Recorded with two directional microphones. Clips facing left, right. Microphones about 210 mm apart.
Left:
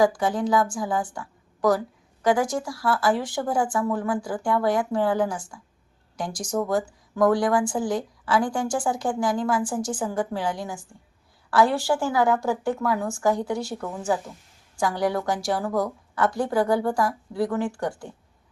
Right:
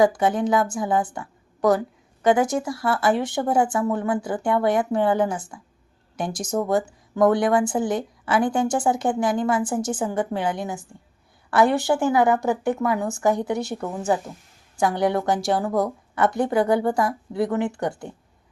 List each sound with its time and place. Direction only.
0.0 s speech: 20° right (ahead or behind)